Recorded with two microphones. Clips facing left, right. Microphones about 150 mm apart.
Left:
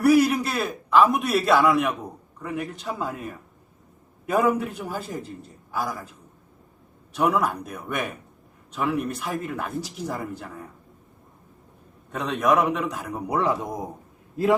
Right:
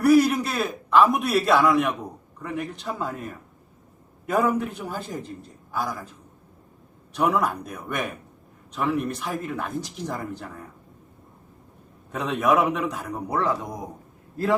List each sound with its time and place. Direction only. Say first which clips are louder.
0.0 s a man's voice: right 1 dB; centre (ahead or behind)
12.1 s speech: even; centre (ahead or behind)
13.2 s speech: left 1 dB; 15° left (ahead or behind)